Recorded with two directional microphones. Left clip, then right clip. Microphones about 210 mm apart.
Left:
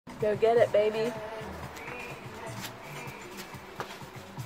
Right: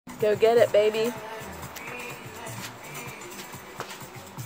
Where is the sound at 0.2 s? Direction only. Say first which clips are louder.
Right 4 dB; 35° right (ahead or behind).